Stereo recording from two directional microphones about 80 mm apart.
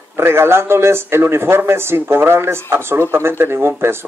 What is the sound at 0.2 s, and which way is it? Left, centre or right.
A man's voice, right.